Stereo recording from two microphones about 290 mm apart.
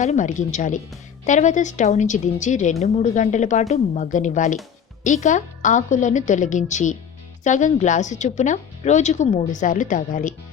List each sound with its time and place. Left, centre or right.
0.0 s a woman's voice: left